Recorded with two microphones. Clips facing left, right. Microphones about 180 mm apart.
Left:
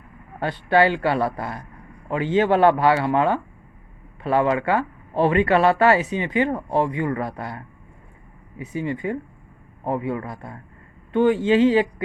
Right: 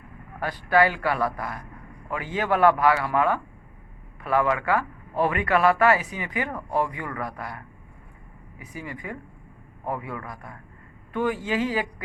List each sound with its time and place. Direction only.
0.3 s speech: 25° left (ahead or behind)